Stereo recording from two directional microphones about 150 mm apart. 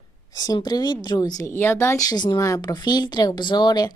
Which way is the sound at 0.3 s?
25° left (ahead or behind).